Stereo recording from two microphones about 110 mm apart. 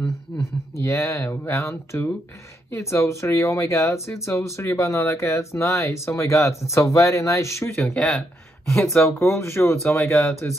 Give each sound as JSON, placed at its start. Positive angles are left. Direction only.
{"t": 0.0, "sound": "speech", "side_deg": 25}